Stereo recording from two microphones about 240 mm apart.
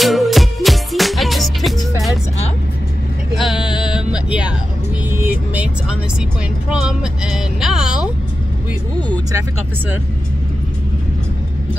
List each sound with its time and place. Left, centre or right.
0.0 s music: centre
3.3 s a sound: centre
3.6 s music: centre
3.9 s music: centre
5.1 s vehicle: centre
6.7 s a sound: centre